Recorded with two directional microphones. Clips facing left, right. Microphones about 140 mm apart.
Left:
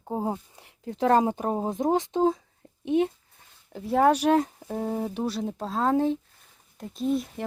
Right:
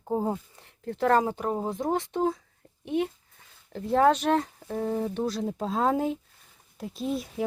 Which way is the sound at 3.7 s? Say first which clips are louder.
Even; 5° left (ahead or behind).